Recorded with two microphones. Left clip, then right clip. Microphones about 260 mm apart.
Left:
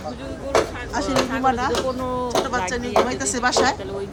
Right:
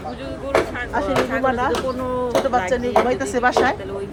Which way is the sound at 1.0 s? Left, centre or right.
Centre.